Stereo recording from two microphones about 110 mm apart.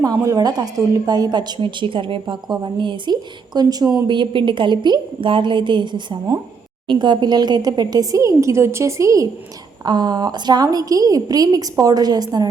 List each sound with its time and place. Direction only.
0.0 s a woman's voice: 30° right (ahead or behind)
9.8 s speech: 40° right (ahead or behind)